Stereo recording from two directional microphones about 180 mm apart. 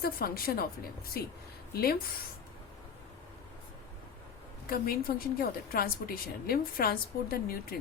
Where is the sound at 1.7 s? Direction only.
60° left (ahead or behind).